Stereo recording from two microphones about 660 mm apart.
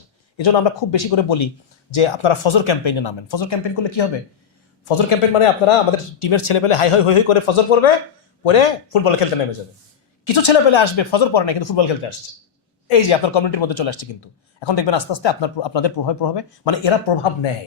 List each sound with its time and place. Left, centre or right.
0.3 s speech: left
5.0 s speech: left